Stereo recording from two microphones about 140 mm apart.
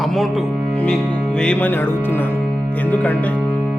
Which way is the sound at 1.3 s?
10° left (ahead or behind).